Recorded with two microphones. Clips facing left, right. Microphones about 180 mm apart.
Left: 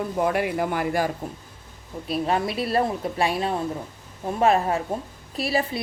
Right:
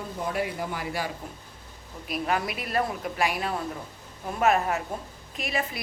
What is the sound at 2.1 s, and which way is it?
A woman's voice, 30° left (ahead or behind).